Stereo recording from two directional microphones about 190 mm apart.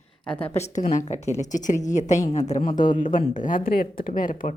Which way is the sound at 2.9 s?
45° left (ahead or behind).